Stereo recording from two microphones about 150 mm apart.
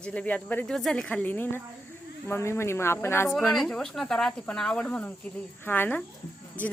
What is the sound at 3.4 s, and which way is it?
Speech, 5° left (ahead or behind).